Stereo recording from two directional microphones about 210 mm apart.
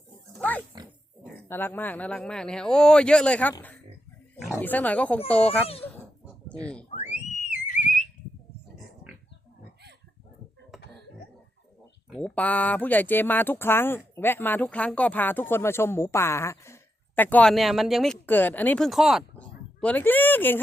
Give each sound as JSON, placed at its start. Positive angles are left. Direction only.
{"t": 0.3, "sound": "pig", "side_deg": 10}
{"t": 1.5, "sound": "a man's voice", "side_deg": 10}
{"t": 5.5, "sound": "a child's voice", "side_deg": 30}
{"t": 7.1, "sound": "a sound", "side_deg": 35}
{"t": 10.7, "sound": "cough", "side_deg": 0}
{"t": 12.1, "sound": "speech", "side_deg": 5}